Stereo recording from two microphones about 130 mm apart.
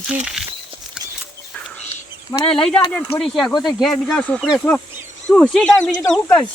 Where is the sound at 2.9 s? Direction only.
10° left (ahead or behind).